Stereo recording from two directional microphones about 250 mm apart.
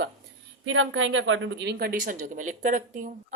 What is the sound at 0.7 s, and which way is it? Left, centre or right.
A woman's voice, right.